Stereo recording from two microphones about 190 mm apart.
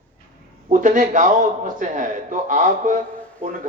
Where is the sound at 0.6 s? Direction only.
40° right (ahead or behind).